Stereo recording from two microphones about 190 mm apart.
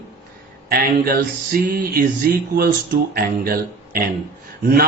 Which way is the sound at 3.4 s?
50° right (ahead or behind).